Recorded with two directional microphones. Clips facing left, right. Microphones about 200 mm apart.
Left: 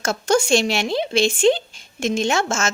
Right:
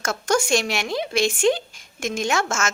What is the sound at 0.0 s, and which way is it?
Speech, 30° left (ahead or behind).